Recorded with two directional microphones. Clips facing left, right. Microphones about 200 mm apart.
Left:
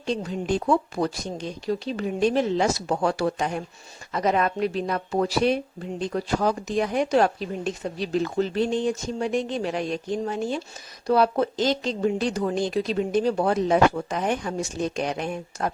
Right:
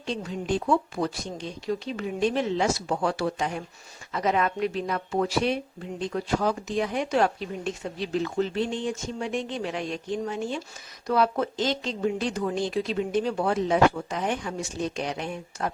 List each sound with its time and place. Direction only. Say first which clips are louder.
0.2 s speech: left 2 dB; 40° left (ahead or behind)